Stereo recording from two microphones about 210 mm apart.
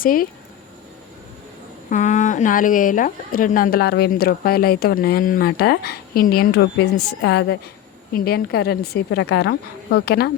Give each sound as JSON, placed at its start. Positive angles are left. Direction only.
{"t": 0.0, "sound": "a woman's voice", "side_deg": 45}
{"t": 1.9, "sound": "a woman's voice", "side_deg": 35}
{"t": 8.1, "sound": "a woman's voice", "side_deg": 45}